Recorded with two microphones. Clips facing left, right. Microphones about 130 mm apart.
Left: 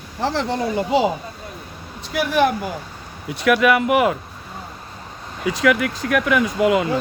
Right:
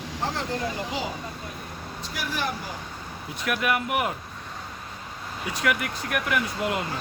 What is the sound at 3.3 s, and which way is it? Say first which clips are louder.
Speech: left 10 dB; 85° left.